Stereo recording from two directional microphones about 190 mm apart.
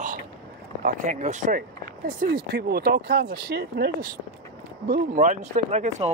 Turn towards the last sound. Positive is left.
turn(degrees=-35)  # may be behind; listen again after turning